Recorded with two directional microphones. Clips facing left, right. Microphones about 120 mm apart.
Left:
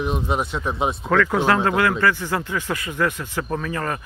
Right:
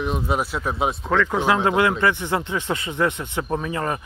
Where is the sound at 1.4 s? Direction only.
15° right (ahead or behind).